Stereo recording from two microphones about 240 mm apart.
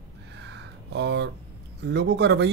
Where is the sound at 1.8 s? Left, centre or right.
Right.